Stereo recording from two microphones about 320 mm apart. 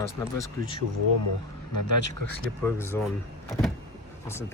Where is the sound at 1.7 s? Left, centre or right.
Left.